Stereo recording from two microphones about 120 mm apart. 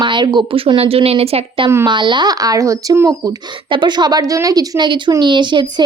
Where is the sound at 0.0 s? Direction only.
40° right (ahead or behind).